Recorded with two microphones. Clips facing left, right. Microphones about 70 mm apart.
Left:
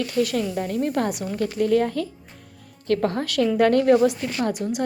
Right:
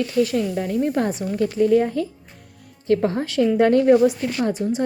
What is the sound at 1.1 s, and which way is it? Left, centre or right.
Speech, left.